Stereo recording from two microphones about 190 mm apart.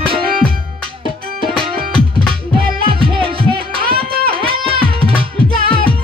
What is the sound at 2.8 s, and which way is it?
Music, 30° right (ahead or behind).